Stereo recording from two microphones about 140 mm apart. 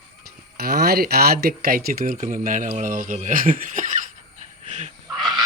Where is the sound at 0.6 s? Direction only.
90° right; by 4.1 s 70° right (ahead or behind).